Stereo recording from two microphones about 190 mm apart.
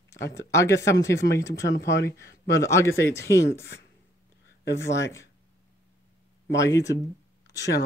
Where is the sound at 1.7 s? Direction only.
65° left (ahead or behind).